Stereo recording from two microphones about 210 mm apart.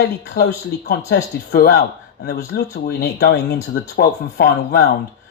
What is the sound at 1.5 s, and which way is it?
Speech, 50° left (ahead or behind).